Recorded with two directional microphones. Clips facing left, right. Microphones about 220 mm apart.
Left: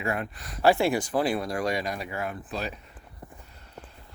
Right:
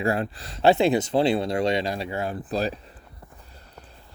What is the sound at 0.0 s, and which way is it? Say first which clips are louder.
Speech: right 6 dB; 30° right (ahead or behind).